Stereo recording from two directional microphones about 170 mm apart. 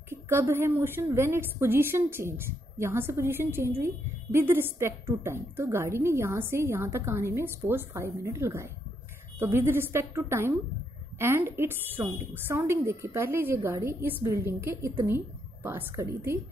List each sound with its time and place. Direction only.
0.1 s a woman's voice: 15° right (ahead or behind)